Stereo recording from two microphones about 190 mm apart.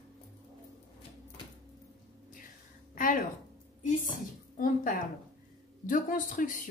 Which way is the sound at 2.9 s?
45° left (ahead or behind).